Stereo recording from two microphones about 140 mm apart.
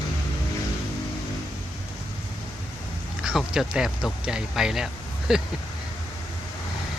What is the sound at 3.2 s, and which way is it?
Speech, 5° right (ahead or behind).